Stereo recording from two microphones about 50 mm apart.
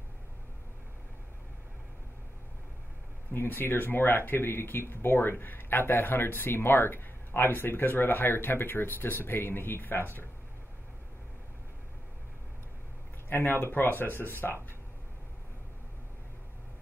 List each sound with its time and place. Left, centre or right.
3.3 s speech: left
13.3 s speech: left